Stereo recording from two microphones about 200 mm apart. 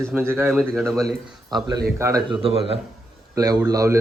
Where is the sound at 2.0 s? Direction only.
15° right (ahead or behind).